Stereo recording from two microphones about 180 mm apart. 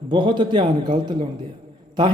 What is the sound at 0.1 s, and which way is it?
A man's voice, 25° right (ahead or behind).